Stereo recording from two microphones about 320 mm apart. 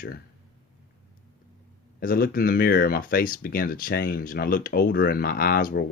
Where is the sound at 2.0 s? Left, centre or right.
Left.